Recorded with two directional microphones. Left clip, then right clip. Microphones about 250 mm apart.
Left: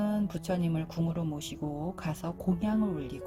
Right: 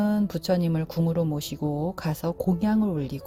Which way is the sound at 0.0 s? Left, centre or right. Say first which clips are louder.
Right 6 dB; right.